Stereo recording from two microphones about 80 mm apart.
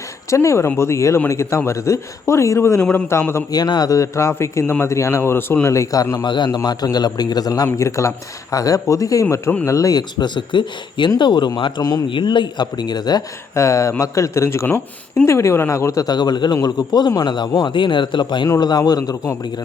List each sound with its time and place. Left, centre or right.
0.3 s speech: left
3.5 s speech: left
6.2 s speech: left
6.6 s speech: left
7.8 s speech: left
11.2 s speech: left
12.1 s a man's voice: left
13.6 s speech: left
16.0 s a man's voice: left
18.4 s speech: left